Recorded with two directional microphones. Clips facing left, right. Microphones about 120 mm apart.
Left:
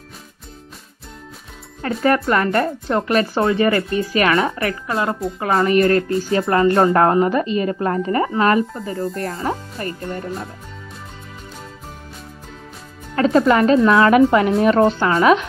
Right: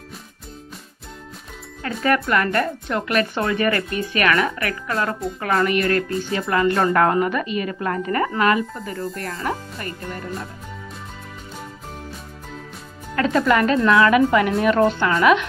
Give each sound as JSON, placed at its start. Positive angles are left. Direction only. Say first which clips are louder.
{"t": 2.0, "sound": "a woman's voice", "louder": "left 3 dB", "side_deg": 30}
{"t": 13.1, "sound": "a woman's voice", "louder": "left 4 dB", "side_deg": 30}